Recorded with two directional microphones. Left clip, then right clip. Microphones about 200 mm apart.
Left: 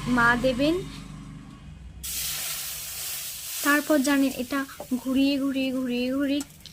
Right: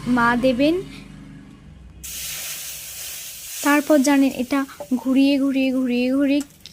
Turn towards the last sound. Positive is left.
turn(degrees=-25)  # may be behind; listen again after turning